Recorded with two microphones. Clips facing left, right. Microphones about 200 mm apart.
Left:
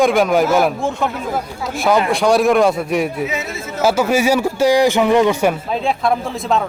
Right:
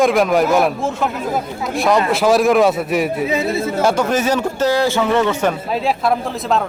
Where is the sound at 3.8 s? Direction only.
5° left (ahead or behind).